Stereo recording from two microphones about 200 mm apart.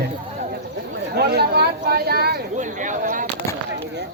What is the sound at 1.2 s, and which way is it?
Speech, 50° right (ahead or behind).